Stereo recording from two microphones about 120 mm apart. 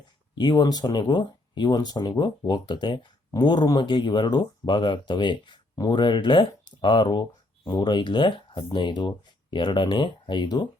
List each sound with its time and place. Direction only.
0.3 s speech: 40° left (ahead or behind)